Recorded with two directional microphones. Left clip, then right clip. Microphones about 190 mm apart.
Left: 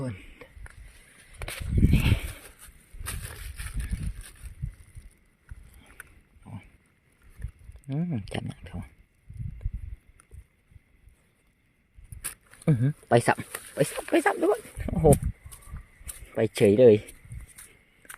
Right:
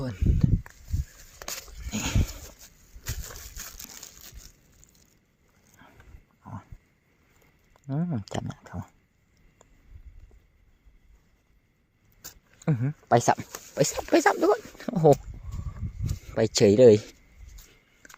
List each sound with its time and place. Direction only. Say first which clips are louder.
0.0 s walk: right 6 dB; centre (ahead or behind)
1.9 s livestock: left 2 dB; 5° right (ahead or behind)
5.8 s boat: right 2 dB; centre (ahead or behind)
6.4 s a sound: right 5 dB; centre (ahead or behind)
7.9 s a sound: right 1 dB; 5° left (ahead or behind)
12.6 s speech: left 1 dB; 25° left (ahead or behind)
13.2 s speech: right 1 dB; 5° left (ahead or behind)
14.1 s speech: right 3 dB; 10° right (ahead or behind)
16.0 s a sound: right 1 dB; 5° right (ahead or behind)
16.8 s speech: right 1 dB; 5° right (ahead or behind)